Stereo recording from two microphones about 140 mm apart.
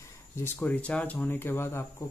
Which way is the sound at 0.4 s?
10° left (ahead or behind).